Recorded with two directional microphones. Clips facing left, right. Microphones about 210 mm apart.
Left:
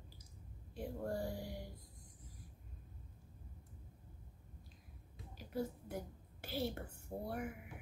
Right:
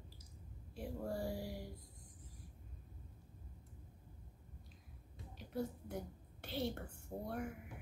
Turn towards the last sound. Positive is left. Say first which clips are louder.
# left 1 dB
turn(degrees=5)  # may be behind; listen again after turning